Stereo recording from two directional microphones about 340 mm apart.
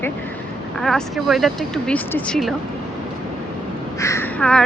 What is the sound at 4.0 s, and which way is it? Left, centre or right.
Speech, centre.